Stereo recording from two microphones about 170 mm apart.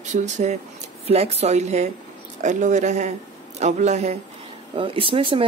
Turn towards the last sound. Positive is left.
turn(degrees=-30)  # may be behind; listen again after turning